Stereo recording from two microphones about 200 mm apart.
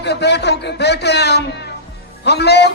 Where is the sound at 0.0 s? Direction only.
55° left (ahead or behind).